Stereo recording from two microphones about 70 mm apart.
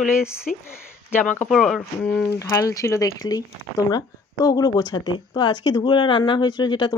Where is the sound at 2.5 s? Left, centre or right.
Left.